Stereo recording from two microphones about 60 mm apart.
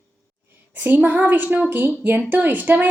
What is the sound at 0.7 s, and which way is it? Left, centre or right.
A woman's voice, right.